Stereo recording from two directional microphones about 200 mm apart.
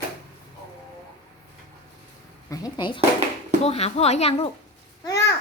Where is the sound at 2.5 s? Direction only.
20° left (ahead or behind).